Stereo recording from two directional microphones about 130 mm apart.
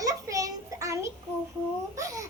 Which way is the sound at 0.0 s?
25° right (ahead or behind).